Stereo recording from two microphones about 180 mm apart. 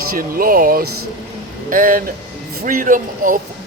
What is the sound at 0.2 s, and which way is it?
Speech, 50° right (ahead or behind).